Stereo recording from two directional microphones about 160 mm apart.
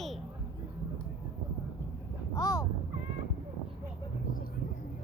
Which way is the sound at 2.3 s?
20° left (ahead or behind).